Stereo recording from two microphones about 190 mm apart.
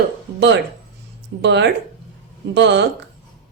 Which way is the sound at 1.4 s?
65° right (ahead or behind).